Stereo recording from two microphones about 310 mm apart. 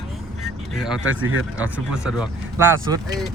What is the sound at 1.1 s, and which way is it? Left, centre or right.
Speech, right.